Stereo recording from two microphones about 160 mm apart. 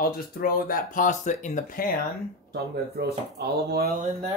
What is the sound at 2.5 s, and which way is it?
Speech, 85° right.